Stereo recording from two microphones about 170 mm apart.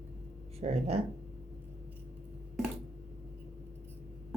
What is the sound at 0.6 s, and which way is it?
Speech, 35° right (ahead or behind).